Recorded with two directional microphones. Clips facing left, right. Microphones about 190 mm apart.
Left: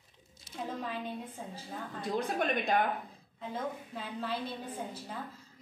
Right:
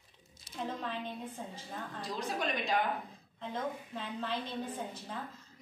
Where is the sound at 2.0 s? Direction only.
55° left (ahead or behind).